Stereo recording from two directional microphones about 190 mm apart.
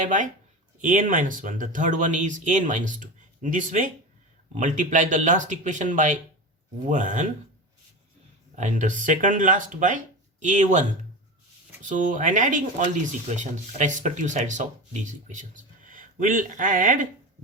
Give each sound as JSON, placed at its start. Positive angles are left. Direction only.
{"t": 0.0, "sound": "speech", "side_deg": -40}
{"t": 8.5, "sound": "speech", "side_deg": -40}